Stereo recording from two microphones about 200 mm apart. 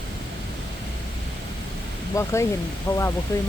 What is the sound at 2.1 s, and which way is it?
Speech, 15° left (ahead or behind).